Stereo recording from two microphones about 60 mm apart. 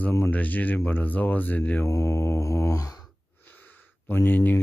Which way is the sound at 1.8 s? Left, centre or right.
Left.